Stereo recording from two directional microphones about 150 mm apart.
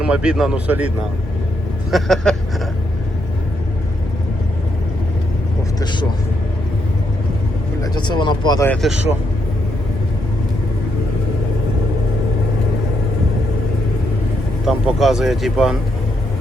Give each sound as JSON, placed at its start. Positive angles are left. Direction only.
{"t": 0.0, "sound": "speech", "side_deg": -5}
{"t": 1.9, "sound": "speech", "side_deg": 0}
{"t": 5.8, "sound": "speech", "side_deg": 30}
{"t": 7.8, "sound": "speech", "side_deg": 30}
{"t": 8.8, "sound": "speech", "side_deg": 0}
{"t": 14.8, "sound": "speech", "side_deg": 0}